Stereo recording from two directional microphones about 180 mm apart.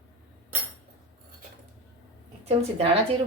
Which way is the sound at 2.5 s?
35° right (ahead or behind).